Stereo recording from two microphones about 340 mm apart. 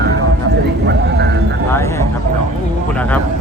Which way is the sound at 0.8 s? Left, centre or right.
Right.